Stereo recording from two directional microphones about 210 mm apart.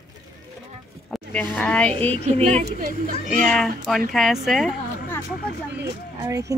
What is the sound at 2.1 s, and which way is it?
Speech, 30° right (ahead or behind).